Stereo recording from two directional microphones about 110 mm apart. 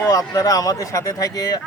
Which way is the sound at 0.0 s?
35° left (ahead or behind).